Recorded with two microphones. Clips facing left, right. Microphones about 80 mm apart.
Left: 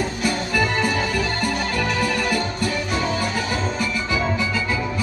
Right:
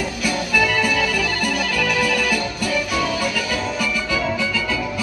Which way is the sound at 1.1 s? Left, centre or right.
Left.